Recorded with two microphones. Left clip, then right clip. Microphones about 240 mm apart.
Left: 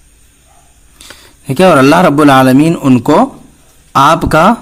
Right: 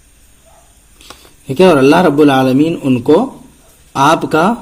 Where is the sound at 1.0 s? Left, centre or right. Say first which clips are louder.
Left 4 dB; left.